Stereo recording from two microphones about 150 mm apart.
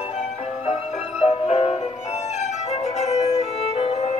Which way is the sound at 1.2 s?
40° left (ahead or behind).